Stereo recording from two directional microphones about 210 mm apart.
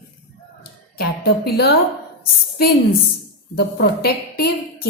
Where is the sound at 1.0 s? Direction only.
50° left (ahead or behind).